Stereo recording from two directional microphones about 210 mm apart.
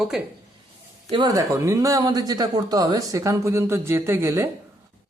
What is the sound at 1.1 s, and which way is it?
Speech, 20° right (ahead or behind).